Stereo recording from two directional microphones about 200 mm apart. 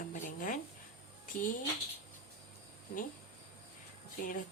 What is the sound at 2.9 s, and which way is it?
Speech, 45° left (ahead or behind).